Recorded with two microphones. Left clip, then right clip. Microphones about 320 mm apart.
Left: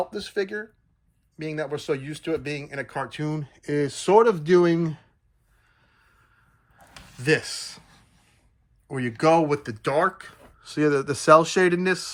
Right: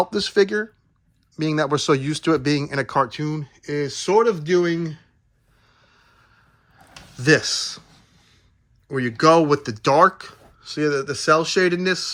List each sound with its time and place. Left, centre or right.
0.1 s speech: centre
7.2 s speech: centre
8.9 s speech: centre
10.6 s speech: centre